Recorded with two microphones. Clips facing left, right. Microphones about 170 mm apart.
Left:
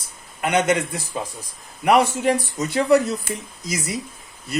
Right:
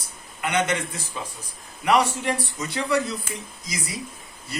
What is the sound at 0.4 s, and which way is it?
Speech, 45° left (ahead or behind).